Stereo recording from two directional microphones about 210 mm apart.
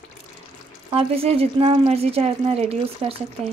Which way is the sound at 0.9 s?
25° right (ahead or behind).